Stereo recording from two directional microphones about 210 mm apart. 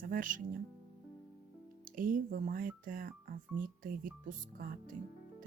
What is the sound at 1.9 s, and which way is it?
Speech, 40° right (ahead or behind).